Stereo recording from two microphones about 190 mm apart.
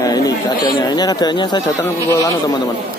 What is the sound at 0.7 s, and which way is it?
Speech, 20° left (ahead or behind).